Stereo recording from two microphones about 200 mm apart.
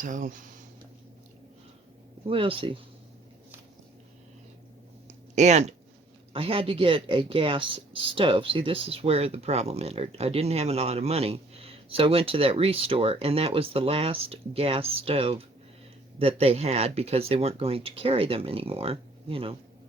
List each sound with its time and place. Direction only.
0.0 s speech: 40° right (ahead or behind)
2.2 s speech: 25° right (ahead or behind)
5.3 s speech: 35° right (ahead or behind)